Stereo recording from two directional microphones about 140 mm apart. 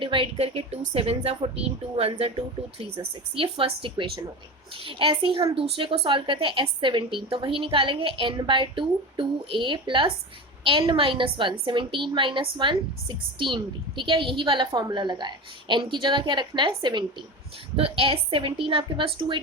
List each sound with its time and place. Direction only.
0.0 s a woman's voice: 40° right (ahead or behind)
3.3 s a woman's voice: 40° right (ahead or behind)